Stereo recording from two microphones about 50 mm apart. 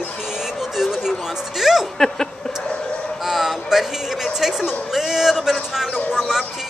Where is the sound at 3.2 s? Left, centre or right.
Centre.